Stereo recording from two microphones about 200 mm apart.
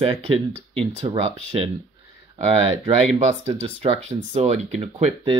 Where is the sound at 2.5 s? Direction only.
30° right (ahead or behind).